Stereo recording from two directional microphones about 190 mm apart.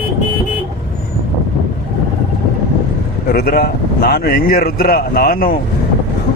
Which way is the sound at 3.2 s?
50° left (ahead or behind).